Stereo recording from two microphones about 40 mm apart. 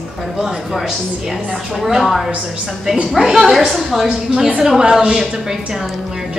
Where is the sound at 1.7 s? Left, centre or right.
Centre.